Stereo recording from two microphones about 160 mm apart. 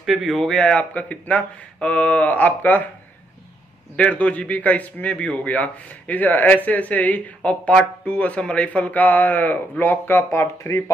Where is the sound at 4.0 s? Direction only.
10° left (ahead or behind).